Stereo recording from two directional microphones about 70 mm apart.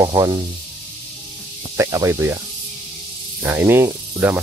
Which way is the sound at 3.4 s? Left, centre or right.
Right.